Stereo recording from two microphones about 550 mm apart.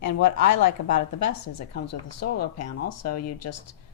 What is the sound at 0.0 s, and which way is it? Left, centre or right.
A woman's voice, left.